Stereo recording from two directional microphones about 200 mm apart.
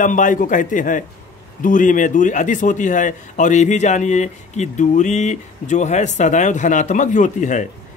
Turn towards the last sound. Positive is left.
turn(degrees=40)  # may be behind; listen again after turning